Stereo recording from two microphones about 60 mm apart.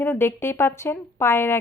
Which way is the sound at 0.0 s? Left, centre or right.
Left.